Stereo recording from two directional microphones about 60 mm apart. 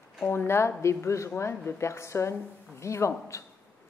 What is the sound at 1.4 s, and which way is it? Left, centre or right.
Speech, left.